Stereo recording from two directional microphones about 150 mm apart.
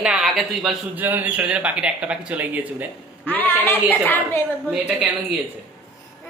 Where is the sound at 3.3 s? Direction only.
10° left (ahead or behind).